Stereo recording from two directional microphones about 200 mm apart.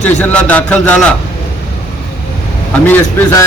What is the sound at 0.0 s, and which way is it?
A man's voice, 10° left (ahead or behind).